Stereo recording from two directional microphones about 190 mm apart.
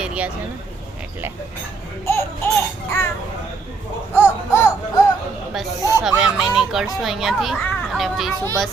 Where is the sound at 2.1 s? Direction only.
15° left (ahead or behind).